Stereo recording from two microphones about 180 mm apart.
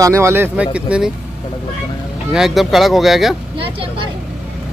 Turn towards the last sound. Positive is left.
turn(degrees=-30)  # may be behind; listen again after turning